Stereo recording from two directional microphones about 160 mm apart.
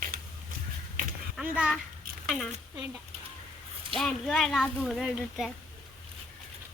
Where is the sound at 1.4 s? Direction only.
5° right (ahead or behind).